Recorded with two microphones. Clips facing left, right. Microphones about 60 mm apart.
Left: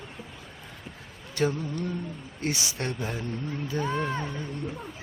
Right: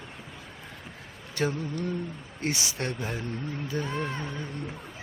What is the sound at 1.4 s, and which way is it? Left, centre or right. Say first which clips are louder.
Speech: left 2 dB; right.